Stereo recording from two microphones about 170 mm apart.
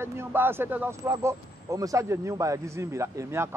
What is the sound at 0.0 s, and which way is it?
Speech, 15° right (ahead or behind).